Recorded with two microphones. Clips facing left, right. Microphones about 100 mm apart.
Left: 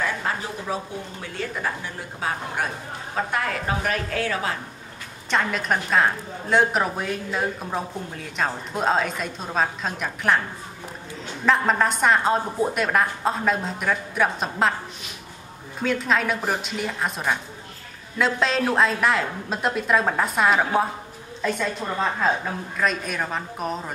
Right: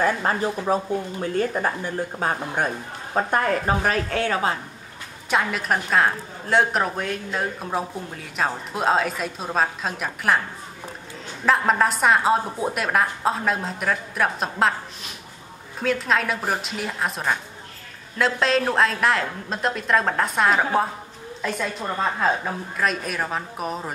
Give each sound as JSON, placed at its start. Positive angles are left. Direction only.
{"t": 0.0, "sound": "a woman's voice", "side_deg": -45}
{"t": 5.3, "sound": "a woman's voice", "side_deg": -5}
{"t": 11.4, "sound": "a woman's voice", "side_deg": 0}
{"t": 15.8, "sound": "a woman's voice", "side_deg": 0}
{"t": 22.8, "sound": "a woman's voice", "side_deg": 0}